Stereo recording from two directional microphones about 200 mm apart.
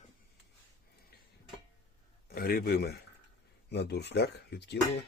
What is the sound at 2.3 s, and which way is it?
Speech, 50° left (ahead or behind).